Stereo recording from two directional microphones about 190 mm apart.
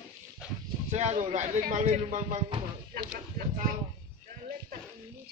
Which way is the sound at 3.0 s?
55° right (ahead or behind).